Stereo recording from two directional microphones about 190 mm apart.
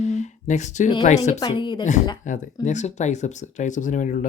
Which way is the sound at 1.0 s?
40° left (ahead or behind).